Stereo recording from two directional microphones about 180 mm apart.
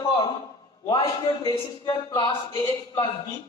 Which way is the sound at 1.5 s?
25° left (ahead or behind).